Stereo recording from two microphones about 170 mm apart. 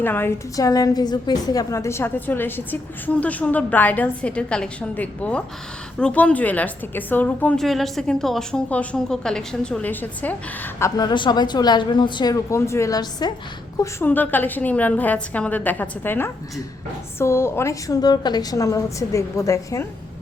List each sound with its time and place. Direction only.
0.0 s a woman's voice: 10° left (ahead or behind)
13.7 s a woman's voice: 10° left (ahead or behind)